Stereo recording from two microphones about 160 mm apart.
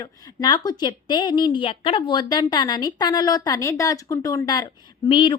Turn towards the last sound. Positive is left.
turn(degrees=35)  # may be behind; listen again after turning